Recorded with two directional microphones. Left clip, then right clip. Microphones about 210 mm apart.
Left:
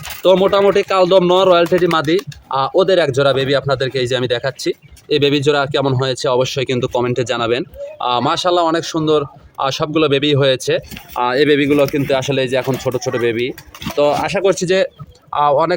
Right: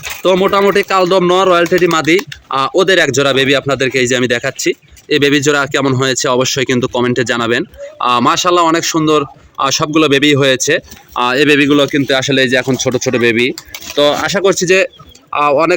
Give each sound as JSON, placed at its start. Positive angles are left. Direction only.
{"t": 0.2, "sound": "speech", "side_deg": -10}